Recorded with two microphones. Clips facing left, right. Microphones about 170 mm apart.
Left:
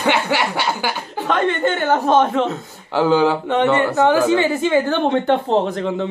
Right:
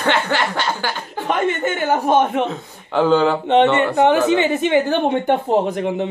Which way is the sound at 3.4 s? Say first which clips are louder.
Right 2 dB; 25° right (ahead or behind).